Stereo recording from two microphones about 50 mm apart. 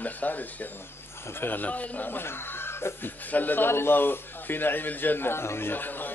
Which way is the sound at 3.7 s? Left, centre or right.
Left.